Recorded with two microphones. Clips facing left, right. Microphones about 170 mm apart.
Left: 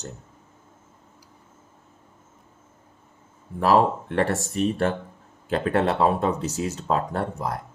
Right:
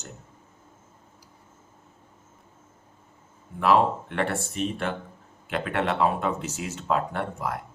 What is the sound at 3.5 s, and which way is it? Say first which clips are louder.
Speech: left 2 dB; 35° left (ahead or behind).